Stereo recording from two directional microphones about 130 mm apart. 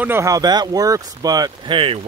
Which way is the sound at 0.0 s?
20° right (ahead or behind).